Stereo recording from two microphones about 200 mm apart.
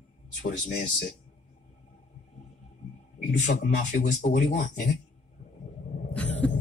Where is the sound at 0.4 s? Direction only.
45° left (ahead or behind).